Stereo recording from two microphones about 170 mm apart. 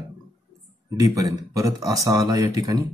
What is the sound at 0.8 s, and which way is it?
A man's voice, 20° right (ahead or behind).